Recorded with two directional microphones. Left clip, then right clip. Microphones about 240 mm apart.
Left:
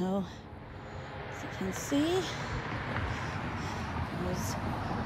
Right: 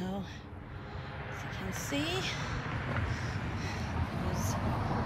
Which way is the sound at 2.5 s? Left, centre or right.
Left.